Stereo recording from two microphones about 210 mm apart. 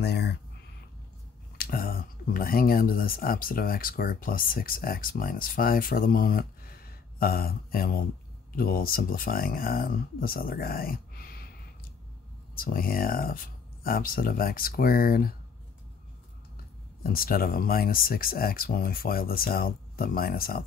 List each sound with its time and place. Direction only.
0.0 s a sound: 50° left (ahead or behind)
1.6 s speech: 45° left (ahead or behind)
12.5 s speech: 45° left (ahead or behind)
17.1 s speech: 45° left (ahead or behind)